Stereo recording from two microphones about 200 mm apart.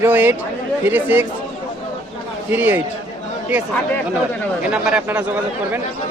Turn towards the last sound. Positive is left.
turn(degrees=-5)  # may be behind; listen again after turning